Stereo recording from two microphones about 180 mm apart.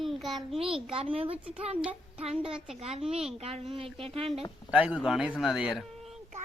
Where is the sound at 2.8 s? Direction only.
35° right (ahead or behind).